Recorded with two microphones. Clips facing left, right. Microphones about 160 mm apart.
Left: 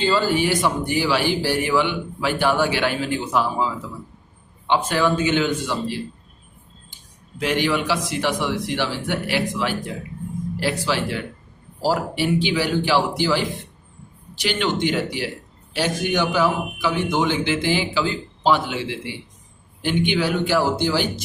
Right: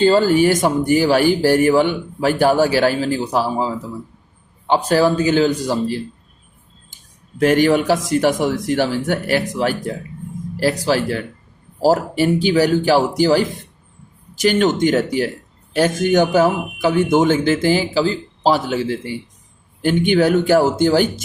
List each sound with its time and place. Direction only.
0.0 s a man's voice: 45° right (ahead or behind)
7.3 s a man's voice: 45° right (ahead or behind)